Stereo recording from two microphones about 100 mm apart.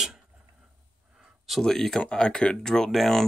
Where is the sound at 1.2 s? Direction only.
Centre (ahead or behind).